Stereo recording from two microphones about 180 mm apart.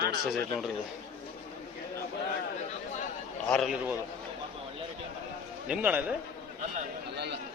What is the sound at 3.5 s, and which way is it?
Speech, centre (ahead or behind).